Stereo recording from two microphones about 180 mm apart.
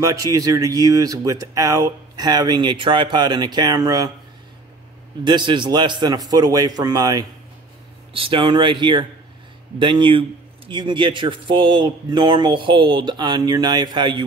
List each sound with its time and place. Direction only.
0.0 s speech: 20° right (ahead or behind)
5.2 s speech: 25° right (ahead or behind)